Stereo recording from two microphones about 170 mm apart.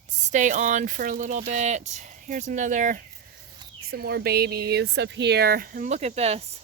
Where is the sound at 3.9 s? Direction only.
65° right (ahead or behind); by 6.5 s 35° right (ahead or behind).